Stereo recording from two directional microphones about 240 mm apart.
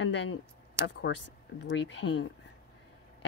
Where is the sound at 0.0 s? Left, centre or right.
Left.